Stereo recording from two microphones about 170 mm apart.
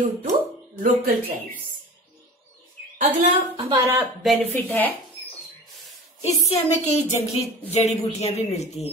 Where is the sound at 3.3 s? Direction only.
30° right (ahead or behind).